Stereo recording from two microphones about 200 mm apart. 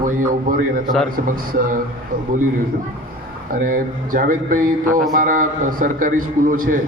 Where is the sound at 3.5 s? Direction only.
45° right (ahead or behind).